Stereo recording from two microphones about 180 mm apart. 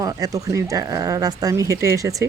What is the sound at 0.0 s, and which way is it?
Speech, 20° right (ahead or behind).